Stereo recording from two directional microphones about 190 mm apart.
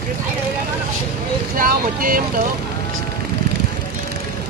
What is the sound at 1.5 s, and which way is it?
Speech, 45° right (ahead or behind).